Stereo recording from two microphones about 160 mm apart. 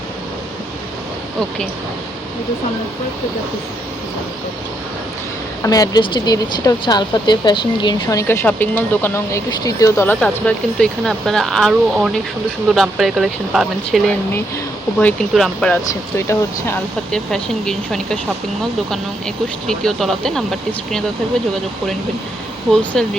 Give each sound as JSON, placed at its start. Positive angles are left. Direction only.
{"t": 5.6, "sound": "speech", "side_deg": 20}
{"t": 10.2, "sound": "speech", "side_deg": 5}
{"t": 17.1, "sound": "speech", "side_deg": 5}
{"t": 19.6, "sound": "speech", "side_deg": 0}
{"t": 22.7, "sound": "speech", "side_deg": 5}